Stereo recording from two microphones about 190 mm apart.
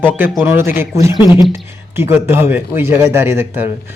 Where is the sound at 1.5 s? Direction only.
10° right (ahead or behind).